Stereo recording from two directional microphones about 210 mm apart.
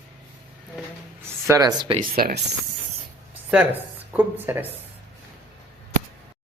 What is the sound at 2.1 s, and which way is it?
Speech, 45° right (ahead or behind).